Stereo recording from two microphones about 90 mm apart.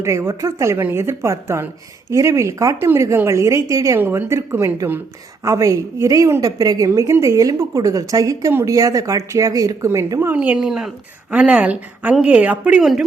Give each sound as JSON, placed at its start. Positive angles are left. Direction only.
{"t": 0.0, "sound": "speech", "side_deg": -30}
{"t": 3.9, "sound": "a woman's voice", "side_deg": -25}
{"t": 10.3, "sound": "a woman's voice", "side_deg": -15}
{"t": 10.7, "sound": "speech", "side_deg": -5}
{"t": 11.3, "sound": "a woman's voice", "side_deg": -15}
{"t": 12.8, "sound": "speech", "side_deg": -5}